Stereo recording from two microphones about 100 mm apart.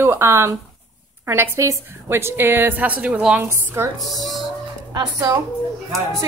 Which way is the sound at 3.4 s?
25° right (ahead or behind).